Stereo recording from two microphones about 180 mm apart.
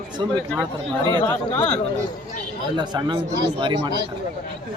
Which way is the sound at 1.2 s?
10° left (ahead or behind).